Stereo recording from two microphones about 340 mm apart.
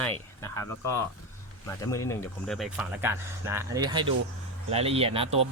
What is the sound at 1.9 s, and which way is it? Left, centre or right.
Speech, centre.